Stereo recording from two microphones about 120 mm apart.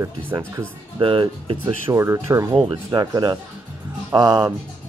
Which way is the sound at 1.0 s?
45° right (ahead or behind).